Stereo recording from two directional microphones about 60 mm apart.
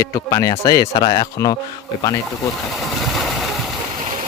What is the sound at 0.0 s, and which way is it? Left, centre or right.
Speech, left.